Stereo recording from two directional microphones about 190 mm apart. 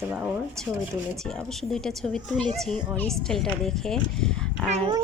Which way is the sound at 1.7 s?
Centre (ahead or behind).